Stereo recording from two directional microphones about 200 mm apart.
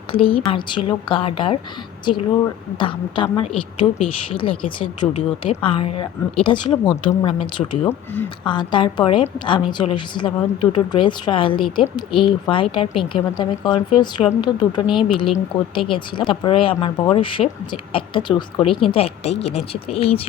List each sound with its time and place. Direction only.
0.1 s a woman's voice: 25° left (ahead or behind)
2.7 s a woman's voice: 25° left (ahead or behind); by 8.3 s 10° left (ahead or behind)
8.4 s a woman's voice: 25° left (ahead or behind)